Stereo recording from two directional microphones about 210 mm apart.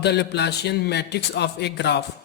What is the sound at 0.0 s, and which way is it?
Speech, 55° left (ahead or behind).